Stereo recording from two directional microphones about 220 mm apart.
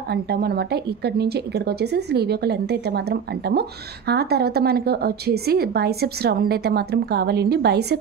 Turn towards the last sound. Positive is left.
turn(degrees=-50)  # may be behind; listen again after turning